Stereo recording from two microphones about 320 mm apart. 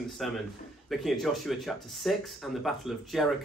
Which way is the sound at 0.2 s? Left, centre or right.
Centre.